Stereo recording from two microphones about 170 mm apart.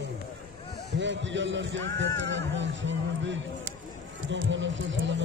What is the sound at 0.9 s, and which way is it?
Music, 90° right.